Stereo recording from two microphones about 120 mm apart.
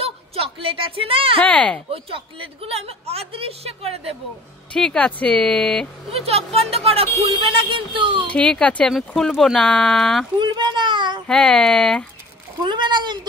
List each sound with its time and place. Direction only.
0.0 s speech: 55° right (ahead or behind)
1.4 s speech: 10° left (ahead or behind)
1.9 s a woman's voice: 50° right (ahead or behind)
4.7 s speech: 10° left (ahead or behind)
6.1 s a woman's voice: 55° right (ahead or behind)
7.4 s speech: 45° right (ahead or behind)
8.3 s speech: 10° left (ahead or behind)
10.4 s a sound: 40° right (ahead or behind)
11.2 s speech: 5° left (ahead or behind)
12.6 s speech: 40° right (ahead or behind)